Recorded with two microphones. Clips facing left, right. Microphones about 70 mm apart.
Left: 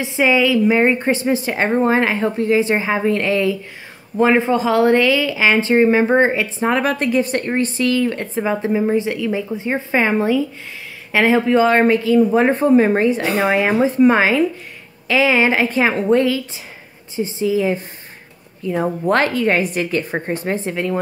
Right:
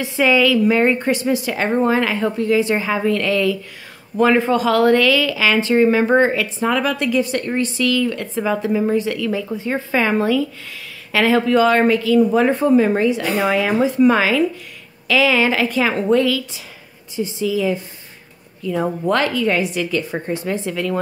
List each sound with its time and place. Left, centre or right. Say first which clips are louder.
0.0 s a woman's voice: even; left